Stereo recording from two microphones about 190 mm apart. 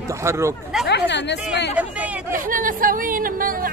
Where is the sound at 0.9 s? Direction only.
65° left (ahead or behind).